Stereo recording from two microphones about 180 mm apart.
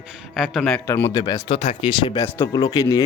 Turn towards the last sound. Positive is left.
turn(degrees=20)  # may be behind; listen again after turning